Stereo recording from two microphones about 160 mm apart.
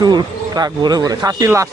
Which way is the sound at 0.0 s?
25° right (ahead or behind).